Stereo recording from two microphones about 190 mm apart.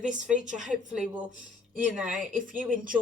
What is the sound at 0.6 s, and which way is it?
Speech, 5° right (ahead or behind).